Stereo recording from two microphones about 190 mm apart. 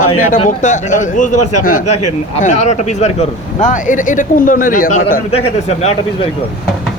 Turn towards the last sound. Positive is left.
turn(degrees=35)  # may be behind; listen again after turning